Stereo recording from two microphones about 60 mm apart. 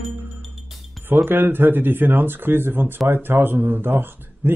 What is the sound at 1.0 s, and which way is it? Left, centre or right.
Speech, right.